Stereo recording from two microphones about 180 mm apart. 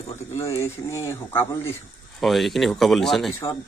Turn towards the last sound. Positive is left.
turn(degrees=0)  # may be behind; listen again after turning